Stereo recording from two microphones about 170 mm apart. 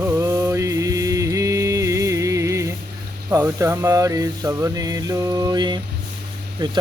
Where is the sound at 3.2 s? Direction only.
15° right (ahead or behind).